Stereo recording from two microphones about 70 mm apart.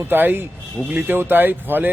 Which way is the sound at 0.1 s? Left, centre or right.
Right.